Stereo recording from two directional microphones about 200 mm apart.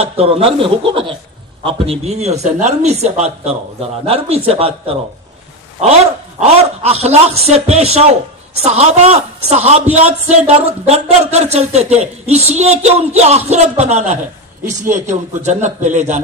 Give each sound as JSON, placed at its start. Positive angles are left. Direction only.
{"t": 0.2, "sound": "a man's voice", "side_deg": -30}
{"t": 6.4, "sound": "a man's voice", "side_deg": -30}